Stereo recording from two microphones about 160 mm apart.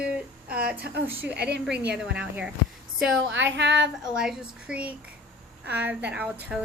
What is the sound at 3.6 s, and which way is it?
Speech, 90° right.